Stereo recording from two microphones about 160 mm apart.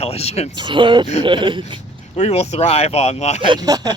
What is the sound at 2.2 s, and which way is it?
Speech, 45° left (ahead or behind).